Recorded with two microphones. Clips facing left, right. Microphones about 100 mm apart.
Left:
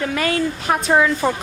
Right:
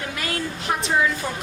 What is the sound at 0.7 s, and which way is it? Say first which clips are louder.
Speech: left 5 dB; 60° left (ahead or behind).